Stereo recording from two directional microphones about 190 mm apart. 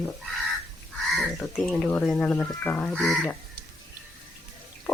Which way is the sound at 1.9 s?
5° left (ahead or behind).